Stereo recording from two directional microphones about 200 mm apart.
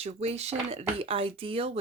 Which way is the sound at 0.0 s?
30° right (ahead or behind).